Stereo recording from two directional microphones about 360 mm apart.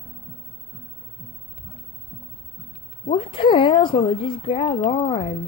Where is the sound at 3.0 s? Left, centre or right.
Centre.